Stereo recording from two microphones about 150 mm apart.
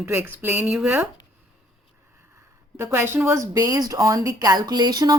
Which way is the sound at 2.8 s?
15° right (ahead or behind).